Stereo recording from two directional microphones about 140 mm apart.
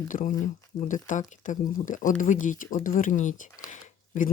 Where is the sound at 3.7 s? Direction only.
65° left (ahead or behind).